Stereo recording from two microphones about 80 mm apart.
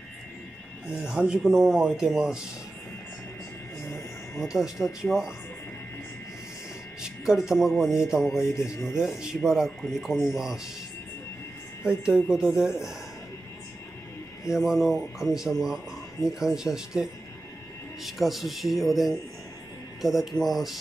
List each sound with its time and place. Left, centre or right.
0.8 s speech: centre
4.4 s speech: centre
7.0 s speech: centre
8.6 s speech: left
9.0 s speech: centre
12.3 s speech: centre
14.5 s speech: centre